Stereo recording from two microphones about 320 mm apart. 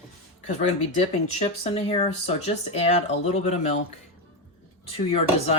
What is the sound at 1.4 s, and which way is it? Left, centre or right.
Speech, centre.